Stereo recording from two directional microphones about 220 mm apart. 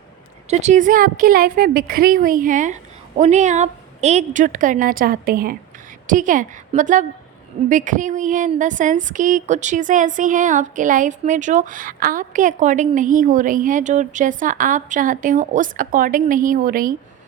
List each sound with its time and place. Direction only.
0.5 s a woman's voice: 30° right (ahead or behind)